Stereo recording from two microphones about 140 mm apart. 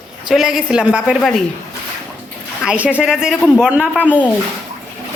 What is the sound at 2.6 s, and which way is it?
A woman's voice, 10° right (ahead or behind).